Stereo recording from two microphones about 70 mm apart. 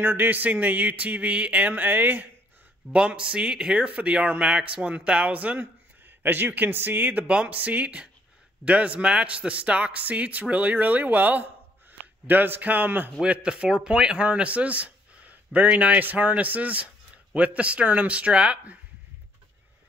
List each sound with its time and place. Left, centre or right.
0.0 s speech: right
2.9 s speech: centre
13.2 s speech: centre